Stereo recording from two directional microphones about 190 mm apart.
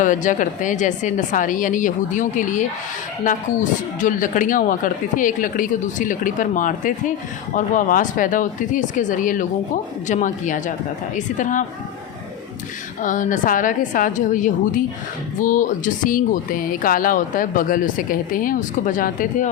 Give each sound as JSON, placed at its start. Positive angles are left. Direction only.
{"t": 0.0, "sound": "speech", "side_deg": 40}
{"t": 13.0, "sound": "speech", "side_deg": 45}